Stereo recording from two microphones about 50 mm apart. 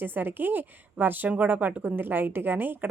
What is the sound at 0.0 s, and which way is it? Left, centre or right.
A woman's voice, right.